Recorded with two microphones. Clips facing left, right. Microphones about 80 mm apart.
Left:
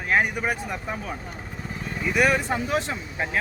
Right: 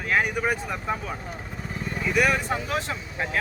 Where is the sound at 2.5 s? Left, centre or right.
Left.